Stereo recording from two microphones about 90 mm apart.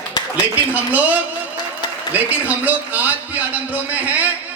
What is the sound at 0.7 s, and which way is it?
A man's voice, 15° right (ahead or behind).